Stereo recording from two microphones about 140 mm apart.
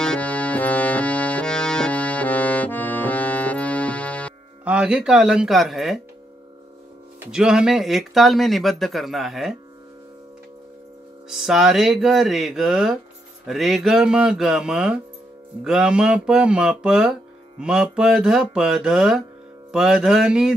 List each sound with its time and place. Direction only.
0.0 s accordion: 10° left (ahead or behind)
4.6 s speech: 10° right (ahead or behind)
7.2 s speech: 5° right (ahead or behind)
11.2 s speech: 5° right (ahead or behind)